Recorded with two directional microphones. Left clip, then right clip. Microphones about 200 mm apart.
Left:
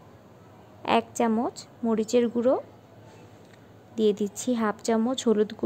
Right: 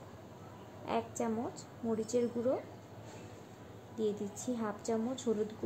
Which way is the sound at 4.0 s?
50° left (ahead or behind).